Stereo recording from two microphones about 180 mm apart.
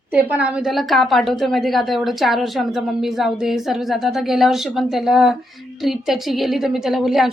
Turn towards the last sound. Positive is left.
turn(degrees=0)  # may be behind; listen again after turning